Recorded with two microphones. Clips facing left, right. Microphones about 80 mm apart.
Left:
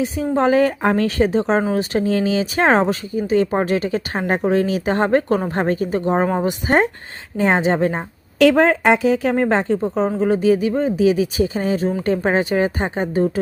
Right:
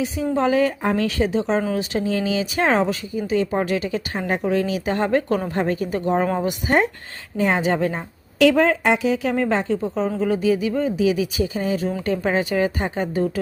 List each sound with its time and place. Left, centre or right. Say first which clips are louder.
0.0 s a woman's voice: left 3 dB; left